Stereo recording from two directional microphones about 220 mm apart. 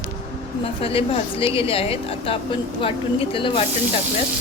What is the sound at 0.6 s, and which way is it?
A woman's voice, 25° left (ahead or behind).